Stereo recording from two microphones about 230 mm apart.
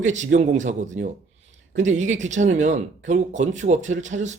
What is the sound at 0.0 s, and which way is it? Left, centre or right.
Speech, right.